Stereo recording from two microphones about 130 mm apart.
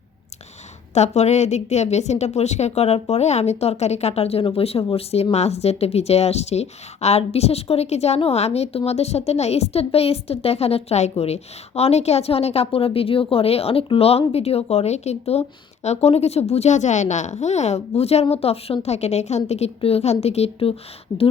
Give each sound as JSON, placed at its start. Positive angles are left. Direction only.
{"t": 0.9, "sound": "a woman's voice", "side_deg": 60}